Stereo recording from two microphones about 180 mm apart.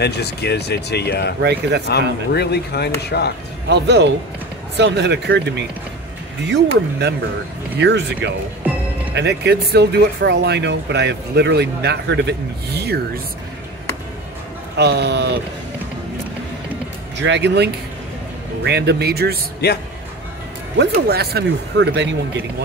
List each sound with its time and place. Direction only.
0.0 s speech: 65° left (ahead or behind)
1.4 s speech: 65° right (ahead or behind)
1.9 s speech: 65° left (ahead or behind)
3.6 s speech: 70° right (ahead or behind)
6.5 s speech: 70° right (ahead or behind)
14.8 s speech: 70° right (ahead or behind)
17.2 s speech: 75° right (ahead or behind); by 19.4 s 60° right (ahead or behind)
19.6 s speech: 65° left (ahead or behind)
20.7 s speech: 65° right (ahead or behind)